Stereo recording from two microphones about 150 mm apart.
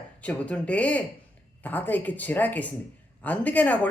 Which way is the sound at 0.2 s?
10° left (ahead or behind).